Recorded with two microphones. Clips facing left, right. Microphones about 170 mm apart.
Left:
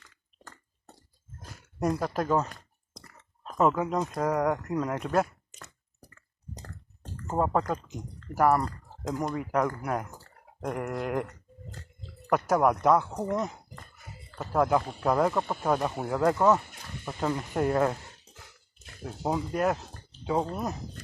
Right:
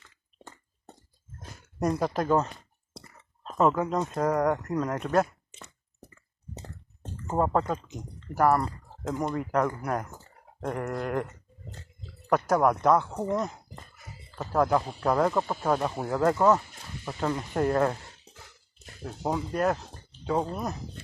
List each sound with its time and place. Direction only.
1.4 s a sound: centre (ahead or behind)
3.6 s speech: 5° left (ahead or behind)
6.1 s a sound: 5° right (ahead or behind)
7.3 s speech: centre (ahead or behind); by 11.3 s 15° left (ahead or behind)
12.3 s speech: 10° left (ahead or behind)
19.2 s speech: 5° left (ahead or behind)